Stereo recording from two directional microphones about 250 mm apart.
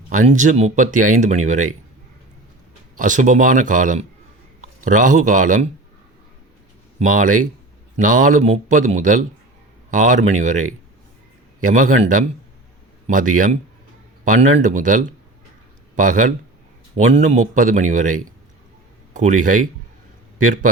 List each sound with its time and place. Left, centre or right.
0.1 s speech: right
2.9 s a man's voice: right
7.0 s speech: right